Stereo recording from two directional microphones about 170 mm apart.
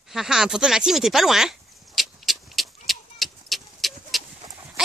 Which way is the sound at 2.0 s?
Centre (ahead or behind).